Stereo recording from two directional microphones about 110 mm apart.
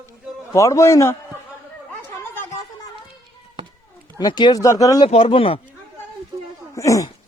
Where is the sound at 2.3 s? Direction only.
20° left (ahead or behind).